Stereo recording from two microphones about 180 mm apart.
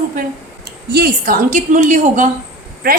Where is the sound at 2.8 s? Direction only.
55° right (ahead or behind).